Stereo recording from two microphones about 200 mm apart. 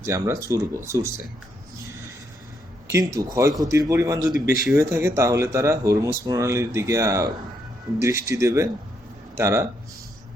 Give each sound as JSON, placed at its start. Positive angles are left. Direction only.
{"t": 0.0, "sound": "speech", "side_deg": -15}
{"t": 2.8, "sound": "speech", "side_deg": -15}